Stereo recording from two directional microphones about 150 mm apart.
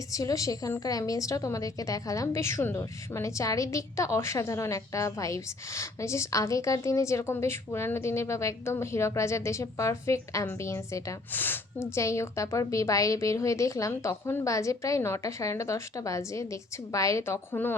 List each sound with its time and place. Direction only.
0.1 s a woman's voice: 20° left (ahead or behind)